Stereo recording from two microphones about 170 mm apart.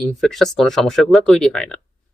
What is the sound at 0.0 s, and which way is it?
Speech, centre (ahead or behind).